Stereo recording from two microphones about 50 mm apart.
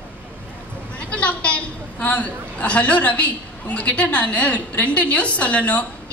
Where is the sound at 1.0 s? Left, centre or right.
Left.